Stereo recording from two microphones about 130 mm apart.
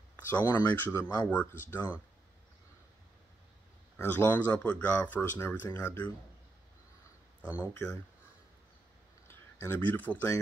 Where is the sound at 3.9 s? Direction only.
15° left (ahead or behind).